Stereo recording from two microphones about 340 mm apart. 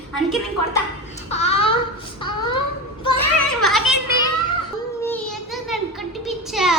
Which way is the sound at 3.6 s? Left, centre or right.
Centre.